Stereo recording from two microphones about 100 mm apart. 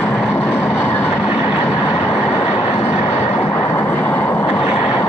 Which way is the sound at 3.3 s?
20° left (ahead or behind).